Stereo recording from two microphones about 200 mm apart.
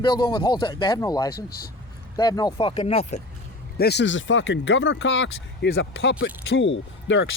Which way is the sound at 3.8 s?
55° left (ahead or behind).